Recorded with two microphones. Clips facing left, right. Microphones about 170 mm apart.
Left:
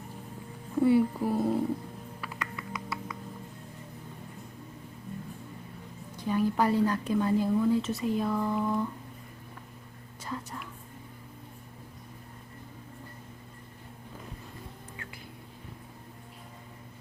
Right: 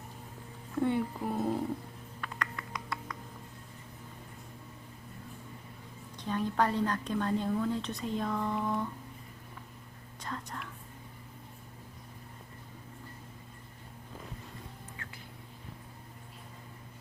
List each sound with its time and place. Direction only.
0.8 s music: 5° left (ahead or behind)
2.2 s typing: 5° left (ahead or behind)
6.1 s a woman's voice: 10° left (ahead or behind)
10.2 s whispering: 5° left (ahead or behind)